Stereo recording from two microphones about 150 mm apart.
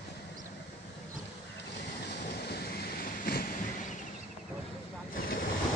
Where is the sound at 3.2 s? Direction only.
70° left (ahead or behind).